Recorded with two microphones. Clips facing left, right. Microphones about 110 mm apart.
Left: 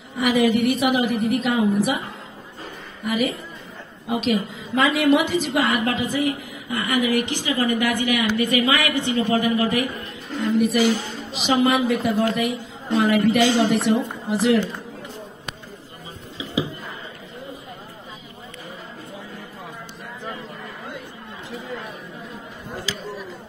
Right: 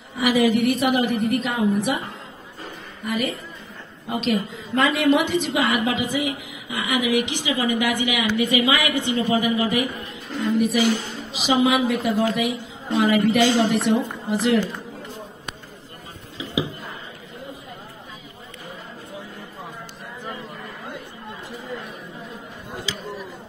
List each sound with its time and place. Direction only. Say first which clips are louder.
0.2 s a woman's voice: even; centre (ahead or behind)
3.0 s a woman's voice: left 2 dB; centre (ahead or behind)
5.9 s a woman's voice: left 2 dB; 15° right (ahead or behind)
10.4 s a woman's voice: left 1 dB; centre (ahead or behind)